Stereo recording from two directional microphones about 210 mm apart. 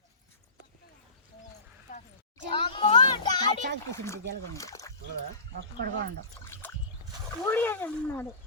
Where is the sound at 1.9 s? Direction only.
35° left (ahead or behind).